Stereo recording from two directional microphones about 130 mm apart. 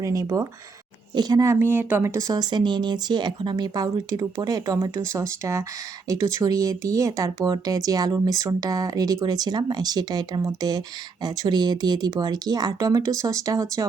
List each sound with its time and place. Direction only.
0.0 s speech: 25° right (ahead or behind)